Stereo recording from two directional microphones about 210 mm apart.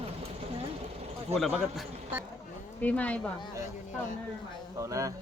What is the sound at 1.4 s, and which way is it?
Speech, centre (ahead or behind).